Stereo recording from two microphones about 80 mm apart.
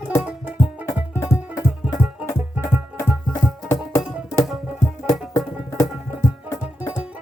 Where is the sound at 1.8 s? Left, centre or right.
Centre.